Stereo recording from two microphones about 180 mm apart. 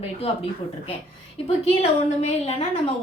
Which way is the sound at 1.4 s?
35° left (ahead or behind).